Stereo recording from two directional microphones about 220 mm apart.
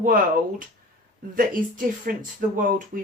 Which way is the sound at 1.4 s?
40° right (ahead or behind).